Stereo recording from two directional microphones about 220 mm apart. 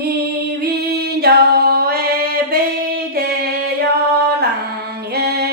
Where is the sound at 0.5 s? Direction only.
45° right (ahead or behind).